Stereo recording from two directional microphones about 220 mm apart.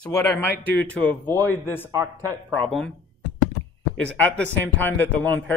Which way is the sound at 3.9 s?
5° left (ahead or behind).